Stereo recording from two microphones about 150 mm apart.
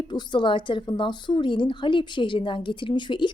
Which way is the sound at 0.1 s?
30° left (ahead or behind).